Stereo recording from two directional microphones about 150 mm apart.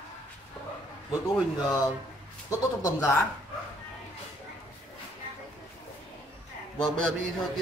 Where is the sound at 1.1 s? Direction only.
20° left (ahead or behind).